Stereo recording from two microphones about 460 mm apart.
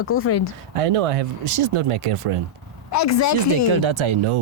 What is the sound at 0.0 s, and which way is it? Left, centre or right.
Speech, left.